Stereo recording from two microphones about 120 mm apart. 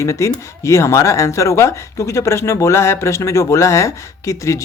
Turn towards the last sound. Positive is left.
turn(degrees=25)  # may be behind; listen again after turning